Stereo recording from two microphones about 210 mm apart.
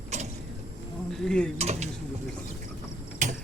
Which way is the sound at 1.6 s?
30° right (ahead or behind).